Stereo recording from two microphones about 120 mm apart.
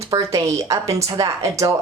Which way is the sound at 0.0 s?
25° right (ahead or behind).